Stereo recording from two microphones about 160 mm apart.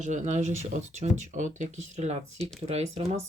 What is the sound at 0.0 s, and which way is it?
Speech, 50° right (ahead or behind).